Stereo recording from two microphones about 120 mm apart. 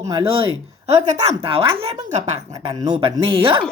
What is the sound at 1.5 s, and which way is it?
Speech, 50° right (ahead or behind).